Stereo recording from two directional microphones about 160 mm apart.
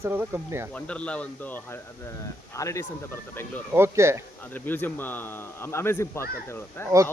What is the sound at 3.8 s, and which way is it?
Speech, 15° right (ahead or behind).